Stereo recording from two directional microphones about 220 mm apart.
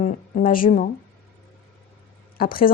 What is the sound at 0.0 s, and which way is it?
Speech, 40° left (ahead or behind).